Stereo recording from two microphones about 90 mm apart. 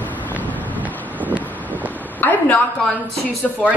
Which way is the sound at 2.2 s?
15° left (ahead or behind).